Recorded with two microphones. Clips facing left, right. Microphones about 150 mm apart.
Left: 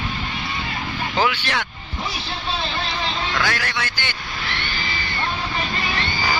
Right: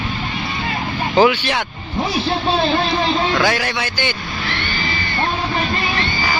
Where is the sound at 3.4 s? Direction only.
15° right (ahead or behind).